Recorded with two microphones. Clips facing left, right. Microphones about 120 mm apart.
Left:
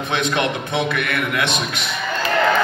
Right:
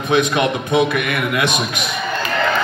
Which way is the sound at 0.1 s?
15° right (ahead or behind).